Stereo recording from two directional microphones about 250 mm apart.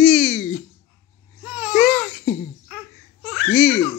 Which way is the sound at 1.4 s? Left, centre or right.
Centre.